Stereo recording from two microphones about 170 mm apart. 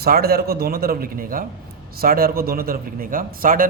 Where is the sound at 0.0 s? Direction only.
65° right (ahead or behind).